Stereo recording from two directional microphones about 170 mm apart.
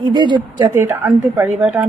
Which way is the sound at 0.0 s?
25° right (ahead or behind).